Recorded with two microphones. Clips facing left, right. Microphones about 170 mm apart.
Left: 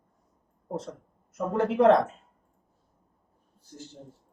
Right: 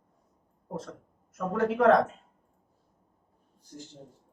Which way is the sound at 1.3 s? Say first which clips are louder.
Left 1 dB; 25° left (ahead or behind).